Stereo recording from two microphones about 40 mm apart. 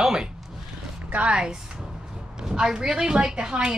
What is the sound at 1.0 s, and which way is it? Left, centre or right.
Speech, right.